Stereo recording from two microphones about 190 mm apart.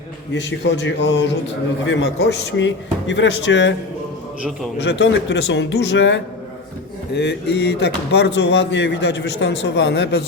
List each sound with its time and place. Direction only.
0.3 s speech: 70° left (ahead or behind)
4.8 s speech: 70° left (ahead or behind)